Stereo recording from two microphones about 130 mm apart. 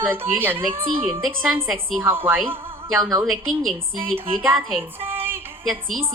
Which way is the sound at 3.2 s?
Centre (ahead or behind).